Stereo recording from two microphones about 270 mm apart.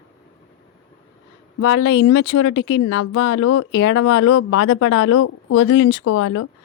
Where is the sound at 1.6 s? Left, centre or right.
Left.